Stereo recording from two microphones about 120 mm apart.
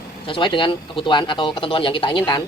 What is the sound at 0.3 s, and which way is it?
Speech, 45° left (ahead or behind).